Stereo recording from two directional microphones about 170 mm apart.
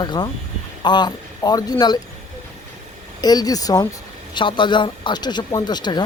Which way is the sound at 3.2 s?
25° left (ahead or behind).